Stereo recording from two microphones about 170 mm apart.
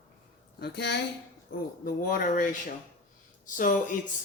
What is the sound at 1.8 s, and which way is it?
Speech, 55° left (ahead or behind).